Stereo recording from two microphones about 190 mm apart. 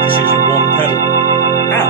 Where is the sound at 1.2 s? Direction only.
45° right (ahead or behind).